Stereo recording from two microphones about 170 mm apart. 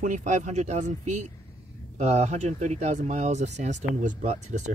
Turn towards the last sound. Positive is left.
turn(degrees=-45)  # may be behind; listen again after turning